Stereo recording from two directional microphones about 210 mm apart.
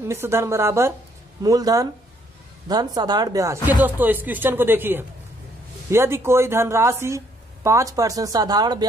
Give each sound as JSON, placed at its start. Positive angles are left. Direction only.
{"t": 0.0, "sound": "a woman's voice", "side_deg": -10}